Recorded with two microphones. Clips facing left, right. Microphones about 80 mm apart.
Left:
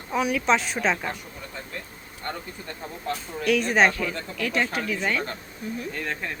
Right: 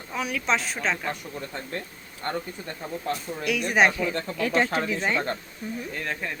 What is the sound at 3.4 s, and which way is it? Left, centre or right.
Speech, centre.